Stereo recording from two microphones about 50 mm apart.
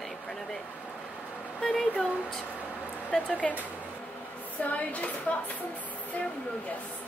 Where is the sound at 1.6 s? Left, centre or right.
Centre.